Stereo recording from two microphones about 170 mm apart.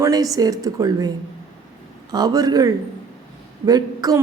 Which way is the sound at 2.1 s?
25° right (ahead or behind).